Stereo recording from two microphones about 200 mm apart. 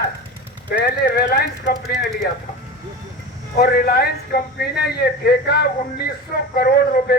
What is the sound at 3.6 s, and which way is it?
A man's voice, 50° left (ahead or behind).